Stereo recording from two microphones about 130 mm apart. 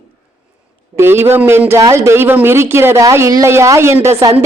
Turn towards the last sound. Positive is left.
turn(degrees=-20)  # may be behind; listen again after turning